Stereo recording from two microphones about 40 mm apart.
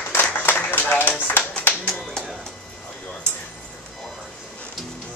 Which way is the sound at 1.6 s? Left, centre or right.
Left.